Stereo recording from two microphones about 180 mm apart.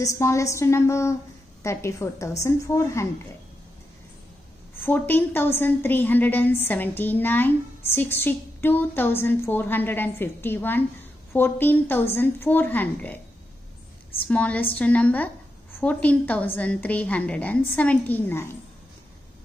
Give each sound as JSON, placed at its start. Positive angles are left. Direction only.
{"t": 0.0, "sound": "a woman's voice", "side_deg": 15}
{"t": 4.8, "sound": "a woman's voice", "side_deg": 10}
{"t": 14.2, "sound": "a woman's voice", "side_deg": 10}